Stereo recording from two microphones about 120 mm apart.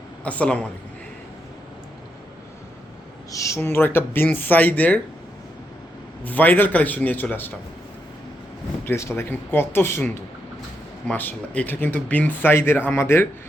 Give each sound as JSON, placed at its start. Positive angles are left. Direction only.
{"t": 0.3, "sound": "speech", "side_deg": 10}
{"t": 3.3, "sound": "speech", "side_deg": 25}
{"t": 6.2, "sound": "speech", "side_deg": 15}
{"t": 8.8, "sound": "speech", "side_deg": 20}
{"t": 11.1, "sound": "speech", "side_deg": 15}